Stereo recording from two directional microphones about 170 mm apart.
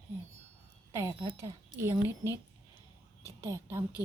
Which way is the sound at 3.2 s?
15° right (ahead or behind).